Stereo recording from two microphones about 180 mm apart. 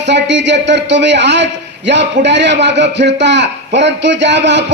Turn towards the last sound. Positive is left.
turn(degrees=-75)  # may be behind; listen again after turning